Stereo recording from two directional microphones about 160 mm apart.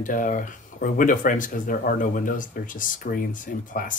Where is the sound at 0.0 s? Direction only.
55° left (ahead or behind).